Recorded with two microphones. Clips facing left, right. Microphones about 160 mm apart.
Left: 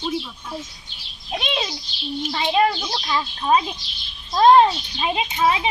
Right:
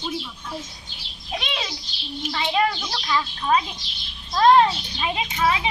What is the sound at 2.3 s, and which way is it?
Speech, 25° left (ahead or behind).